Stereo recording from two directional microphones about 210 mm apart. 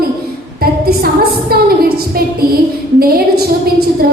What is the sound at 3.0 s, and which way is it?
Speech, 45° right (ahead or behind).